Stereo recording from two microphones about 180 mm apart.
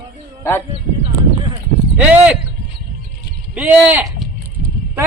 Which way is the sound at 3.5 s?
10° right (ahead or behind).